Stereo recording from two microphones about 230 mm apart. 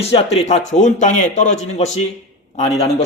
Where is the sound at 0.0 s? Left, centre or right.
Left.